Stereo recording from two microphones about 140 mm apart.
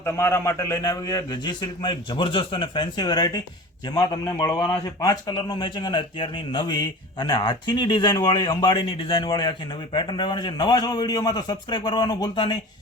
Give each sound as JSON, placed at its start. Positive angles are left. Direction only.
{"t": 0.0, "sound": "a man's voice", "side_deg": 20}